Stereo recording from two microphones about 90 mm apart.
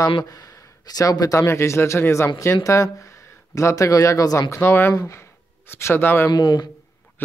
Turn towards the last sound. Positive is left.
turn(degrees=50)  # may be behind; listen again after turning